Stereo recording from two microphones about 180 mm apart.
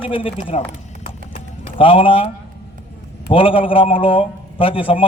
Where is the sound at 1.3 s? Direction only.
30° left (ahead or behind).